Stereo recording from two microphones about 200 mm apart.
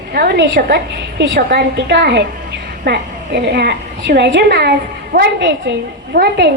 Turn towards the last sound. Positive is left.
turn(degrees=-50)  # may be behind; listen again after turning